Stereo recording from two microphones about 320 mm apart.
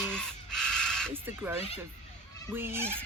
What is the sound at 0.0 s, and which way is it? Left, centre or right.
Crow, centre.